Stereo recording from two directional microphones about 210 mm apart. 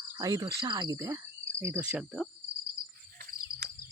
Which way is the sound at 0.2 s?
20° right (ahead or behind).